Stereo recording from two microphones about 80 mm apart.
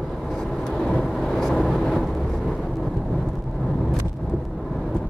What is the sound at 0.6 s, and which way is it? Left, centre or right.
Vehicle, centre.